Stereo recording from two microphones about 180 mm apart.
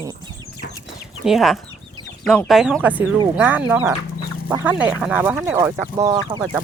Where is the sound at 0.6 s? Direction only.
55° left (ahead or behind).